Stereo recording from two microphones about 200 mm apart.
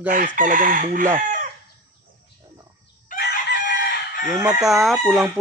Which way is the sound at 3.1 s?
55° left (ahead or behind).